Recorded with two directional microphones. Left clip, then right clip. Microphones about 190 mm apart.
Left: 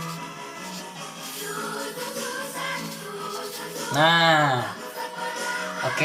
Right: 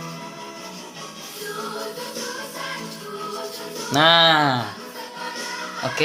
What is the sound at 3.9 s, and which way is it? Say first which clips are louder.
Speech: right 3 dB; 50° right (ahead or behind).